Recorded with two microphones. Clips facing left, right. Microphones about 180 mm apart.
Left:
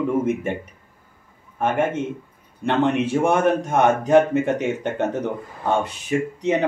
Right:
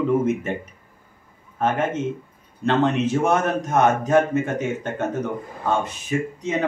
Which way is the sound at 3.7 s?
60° left (ahead or behind).